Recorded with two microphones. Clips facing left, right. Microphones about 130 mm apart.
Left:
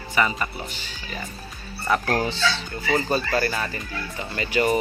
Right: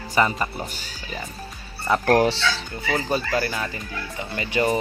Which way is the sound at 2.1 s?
70° right (ahead or behind).